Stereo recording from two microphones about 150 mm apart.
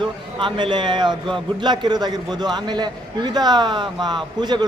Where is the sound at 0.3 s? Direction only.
30° right (ahead or behind).